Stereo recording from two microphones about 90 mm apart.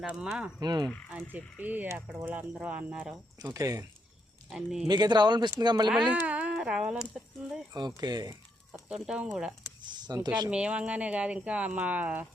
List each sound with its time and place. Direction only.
0.0 s speech: 5° right (ahead or behind)
0.6 s speech: 50° right (ahead or behind)
1.1 s speech: 20° right (ahead or behind)
3.5 s speech: 40° right (ahead or behind)
4.4 s speech: 5° right (ahead or behind)
4.9 s speech: 50° right (ahead or behind)
5.9 s speech: 10° right (ahead or behind)
7.7 s speech: 50° right (ahead or behind)
8.7 s speech: 10° right (ahead or behind)
9.8 s a sound: 55° right (ahead or behind)
10.5 s speech: 10° right (ahead or behind)